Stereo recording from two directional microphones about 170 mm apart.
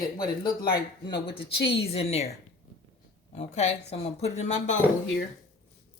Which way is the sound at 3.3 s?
40° left (ahead or behind).